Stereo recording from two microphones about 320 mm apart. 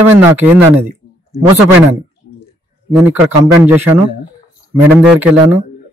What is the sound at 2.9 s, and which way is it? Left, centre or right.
A man's voice, centre.